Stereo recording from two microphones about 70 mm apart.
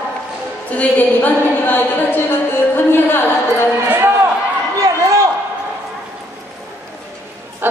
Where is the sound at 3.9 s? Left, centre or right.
Right.